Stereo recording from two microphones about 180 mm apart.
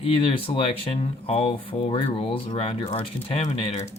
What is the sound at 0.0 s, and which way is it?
Speech, 30° left (ahead or behind).